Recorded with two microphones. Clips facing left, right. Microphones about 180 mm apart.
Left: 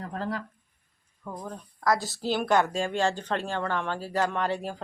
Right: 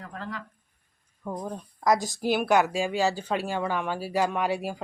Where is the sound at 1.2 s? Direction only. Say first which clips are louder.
Right 4 dB; 20° right (ahead or behind).